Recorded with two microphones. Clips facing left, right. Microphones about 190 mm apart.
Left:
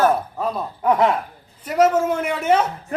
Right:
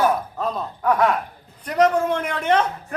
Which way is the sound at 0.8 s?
25° left (ahead or behind).